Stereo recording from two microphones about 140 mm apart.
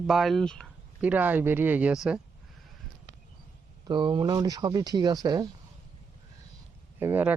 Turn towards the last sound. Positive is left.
turn(degrees=-15)  # may be behind; listen again after turning